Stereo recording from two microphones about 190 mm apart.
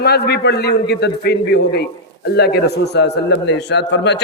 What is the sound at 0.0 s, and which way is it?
A man's voice, 60° left (ahead or behind).